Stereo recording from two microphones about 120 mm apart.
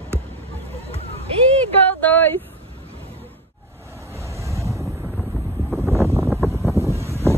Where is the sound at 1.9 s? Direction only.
15° left (ahead or behind).